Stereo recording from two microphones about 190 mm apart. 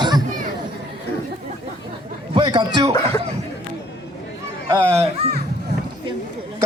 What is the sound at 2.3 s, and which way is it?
Speech, 25° right (ahead or behind).